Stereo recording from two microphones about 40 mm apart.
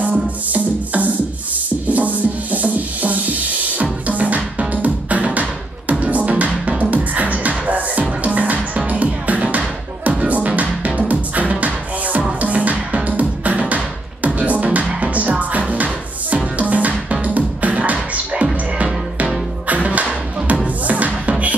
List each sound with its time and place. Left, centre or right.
0.1 s music: right
19.7 s music: right